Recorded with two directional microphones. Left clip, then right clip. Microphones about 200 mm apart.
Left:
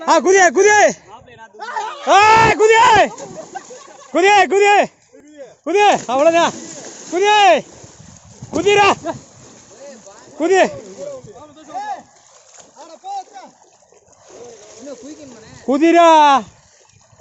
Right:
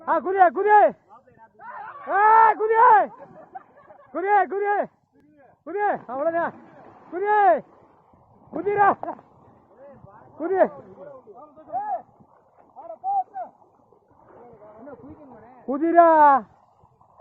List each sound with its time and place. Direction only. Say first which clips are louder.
0.0 s a man's voice: left 7 dB; 15° left (ahead or behind)
2.0 s a man's voice: left 6 dB; 30° left (ahead or behind)
10.4 s speech: left 7 dB; 30° left (ahead or behind)
15.6 s speech: left 6 dB; 25° left (ahead or behind)